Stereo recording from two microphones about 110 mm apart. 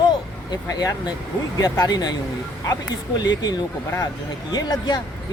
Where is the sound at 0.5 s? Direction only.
35° left (ahead or behind).